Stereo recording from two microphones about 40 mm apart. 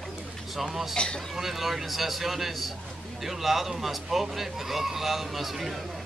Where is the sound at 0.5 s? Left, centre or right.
Centre.